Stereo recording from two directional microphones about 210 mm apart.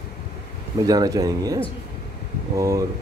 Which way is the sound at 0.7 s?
20° right (ahead or behind).